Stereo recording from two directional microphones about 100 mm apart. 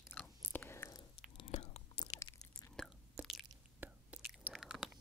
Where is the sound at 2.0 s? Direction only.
80° left.